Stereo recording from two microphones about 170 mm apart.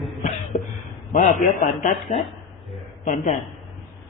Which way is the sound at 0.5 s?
45° left (ahead or behind).